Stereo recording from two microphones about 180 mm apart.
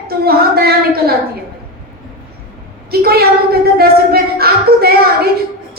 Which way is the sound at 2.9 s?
60° right (ahead or behind).